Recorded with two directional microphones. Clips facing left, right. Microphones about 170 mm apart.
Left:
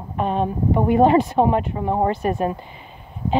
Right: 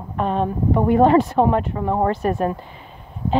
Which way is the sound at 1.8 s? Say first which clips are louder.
Even; 25° left (ahead or behind).